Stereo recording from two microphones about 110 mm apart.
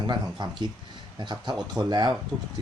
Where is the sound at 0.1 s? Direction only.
40° right (ahead or behind).